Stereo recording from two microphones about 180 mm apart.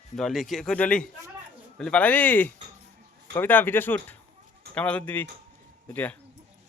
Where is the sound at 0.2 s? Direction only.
Centre (ahead or behind).